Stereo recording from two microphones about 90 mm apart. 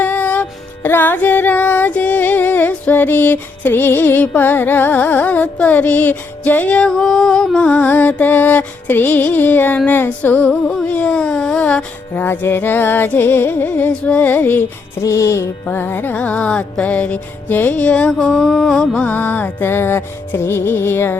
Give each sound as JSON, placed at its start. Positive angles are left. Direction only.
{"t": 0.0, "sound": "music", "side_deg": 20}
{"t": 12.2, "sound": "music", "side_deg": 25}
{"t": 15.0, "sound": "music", "side_deg": 35}
{"t": 15.6, "sound": "music", "side_deg": 20}